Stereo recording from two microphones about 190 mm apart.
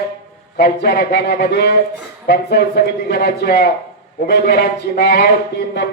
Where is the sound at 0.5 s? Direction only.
55° left (ahead or behind).